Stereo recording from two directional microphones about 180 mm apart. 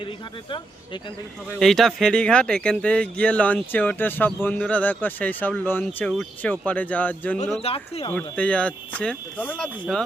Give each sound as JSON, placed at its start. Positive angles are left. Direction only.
{"t": 1.5, "sound": "speech", "side_deg": 0}
{"t": 7.6, "sound": "speech", "side_deg": 35}
{"t": 8.1, "sound": "speech", "side_deg": 5}